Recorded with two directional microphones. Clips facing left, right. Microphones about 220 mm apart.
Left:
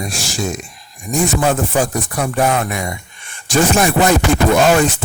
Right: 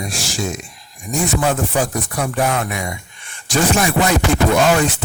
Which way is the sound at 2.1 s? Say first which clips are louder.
Left 3 dB; 45° left (ahead or behind).